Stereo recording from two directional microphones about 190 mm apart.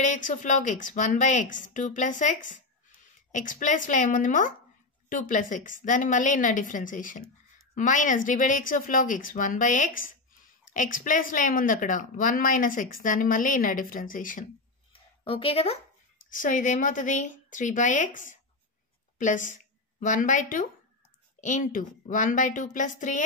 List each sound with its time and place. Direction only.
0.0 s a woman's voice: 40° left (ahead or behind)
14.9 s a sound: 30° left (ahead or behind)
16.3 s a woman's voice: 45° left (ahead or behind)